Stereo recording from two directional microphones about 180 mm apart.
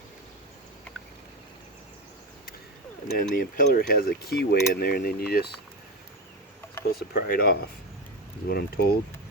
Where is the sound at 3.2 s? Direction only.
50° left (ahead or behind).